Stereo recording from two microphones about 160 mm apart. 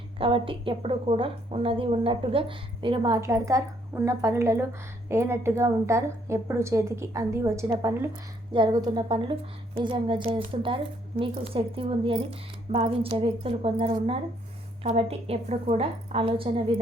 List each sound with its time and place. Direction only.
0.2 s a woman's voice: 35° right (ahead or behind)
3.2 s a woman's voice: 20° right (ahead or behind); by 16.8 s 35° right (ahead or behind)